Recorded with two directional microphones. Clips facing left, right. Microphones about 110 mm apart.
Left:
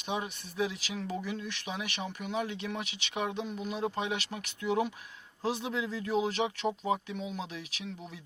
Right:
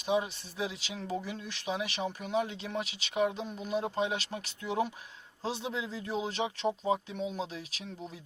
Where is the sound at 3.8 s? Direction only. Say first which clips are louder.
Even; 30° right (ahead or behind).